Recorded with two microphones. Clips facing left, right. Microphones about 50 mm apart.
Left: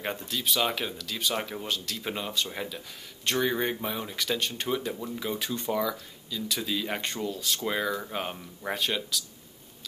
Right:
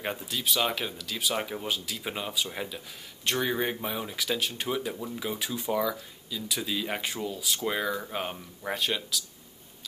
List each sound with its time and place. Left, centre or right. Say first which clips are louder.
0.0 s speech: even; centre